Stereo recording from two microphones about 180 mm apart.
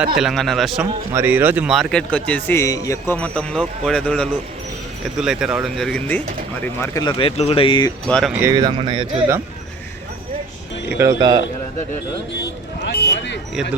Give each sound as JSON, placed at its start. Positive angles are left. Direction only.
{"t": 0.2, "sound": "speech", "side_deg": 0}
{"t": 1.1, "sound": "speech", "side_deg": -10}
{"t": 3.2, "sound": "speech", "side_deg": 5}
{"t": 8.0, "sound": "speech", "side_deg": 0}
{"t": 8.5, "sound": "speech", "side_deg": -30}
{"t": 10.8, "sound": "speech", "side_deg": -15}
{"t": 12.8, "sound": "a sound", "side_deg": 75}